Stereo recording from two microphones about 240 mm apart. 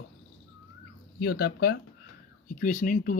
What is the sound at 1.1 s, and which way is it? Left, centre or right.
Speech, left.